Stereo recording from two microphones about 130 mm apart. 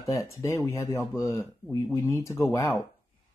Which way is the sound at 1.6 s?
10° left (ahead or behind).